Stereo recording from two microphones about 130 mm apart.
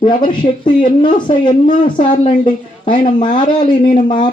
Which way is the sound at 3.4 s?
75° left (ahead or behind).